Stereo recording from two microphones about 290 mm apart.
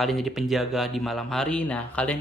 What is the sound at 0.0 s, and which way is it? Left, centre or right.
A man's voice, centre.